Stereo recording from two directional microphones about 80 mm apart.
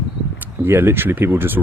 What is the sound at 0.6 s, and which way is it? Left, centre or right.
Speech, right.